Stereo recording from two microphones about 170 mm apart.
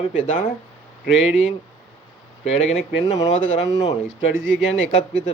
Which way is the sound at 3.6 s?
20° left (ahead or behind).